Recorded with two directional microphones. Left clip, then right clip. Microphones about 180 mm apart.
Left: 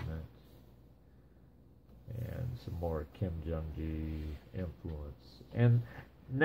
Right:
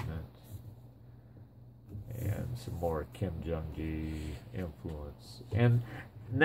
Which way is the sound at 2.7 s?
10° right (ahead or behind).